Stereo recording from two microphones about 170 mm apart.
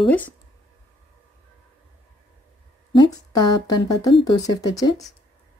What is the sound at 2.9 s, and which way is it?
Speech, 25° left (ahead or behind).